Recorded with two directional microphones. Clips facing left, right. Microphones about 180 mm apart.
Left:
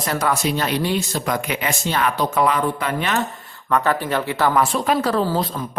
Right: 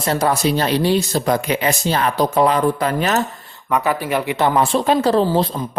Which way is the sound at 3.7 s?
10° right (ahead or behind).